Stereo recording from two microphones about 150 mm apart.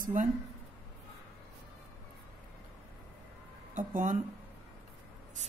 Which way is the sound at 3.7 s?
60° right (ahead or behind).